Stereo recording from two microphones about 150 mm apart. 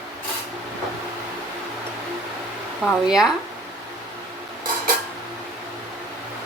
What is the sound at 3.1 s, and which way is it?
Speech, 5° right (ahead or behind).